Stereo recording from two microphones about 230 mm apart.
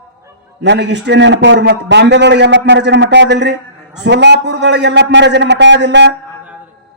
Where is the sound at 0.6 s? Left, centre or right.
Right.